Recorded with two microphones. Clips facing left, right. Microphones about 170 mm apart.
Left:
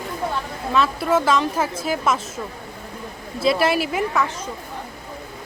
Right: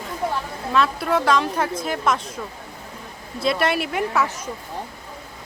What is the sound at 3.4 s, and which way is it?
Speech, centre (ahead or behind).